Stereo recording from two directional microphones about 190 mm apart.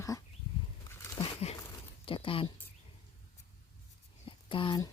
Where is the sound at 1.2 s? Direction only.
35° left (ahead or behind).